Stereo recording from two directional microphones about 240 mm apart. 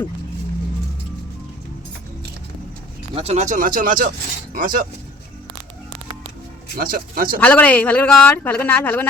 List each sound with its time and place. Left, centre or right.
3.2 s speech: right
6.7 s speech: right
7.3 s a man's voice: centre